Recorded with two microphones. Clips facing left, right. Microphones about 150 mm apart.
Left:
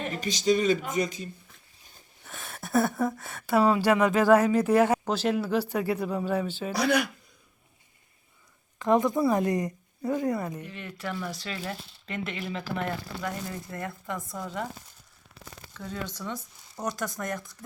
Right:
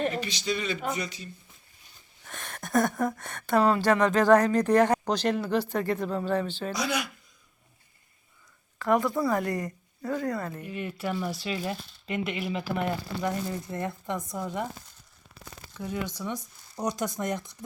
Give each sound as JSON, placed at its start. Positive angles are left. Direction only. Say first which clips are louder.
{"t": 0.2, "sound": "speech", "louder": "left 6 dB", "side_deg": 45}
{"t": 2.2, "sound": "speech", "louder": "right 1 dB", "side_deg": 5}
{"t": 6.7, "sound": "speech", "louder": "left 7 dB", "side_deg": 60}
{"t": 8.8, "sound": "a woman's voice", "louder": "left 2 dB", "side_deg": 20}
{"t": 10.6, "sound": "speech", "louder": "right 4 dB", "side_deg": -15}
{"t": 11.3, "sound": "speech", "louder": "right 4 dB", "side_deg": -5}
{"t": 11.5, "sound": "speech", "louder": "right 3 dB", "side_deg": -15}
{"t": 15.7, "sound": "speech", "louder": "right 3 dB", "side_deg": -15}